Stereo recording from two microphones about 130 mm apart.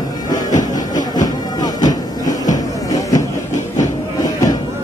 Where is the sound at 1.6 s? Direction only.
30° left (ahead or behind).